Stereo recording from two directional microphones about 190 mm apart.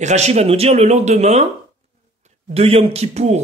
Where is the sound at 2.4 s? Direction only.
30° right (ahead or behind).